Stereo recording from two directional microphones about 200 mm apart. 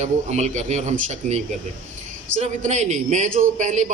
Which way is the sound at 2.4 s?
35° right (ahead or behind).